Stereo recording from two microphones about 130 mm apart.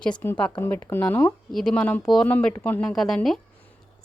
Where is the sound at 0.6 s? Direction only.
20° left (ahead or behind).